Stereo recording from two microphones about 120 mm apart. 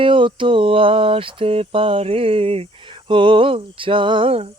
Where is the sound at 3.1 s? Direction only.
45° right (ahead or behind).